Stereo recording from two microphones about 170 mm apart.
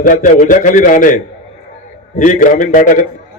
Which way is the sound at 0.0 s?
55° left (ahead or behind).